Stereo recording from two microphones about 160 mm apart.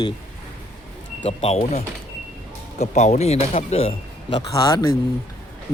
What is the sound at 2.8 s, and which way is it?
Speech, 45° left (ahead or behind).